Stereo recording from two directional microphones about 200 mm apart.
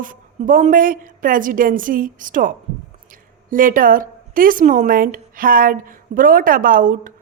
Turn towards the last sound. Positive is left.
turn(degrees=-45)  # may be behind; listen again after turning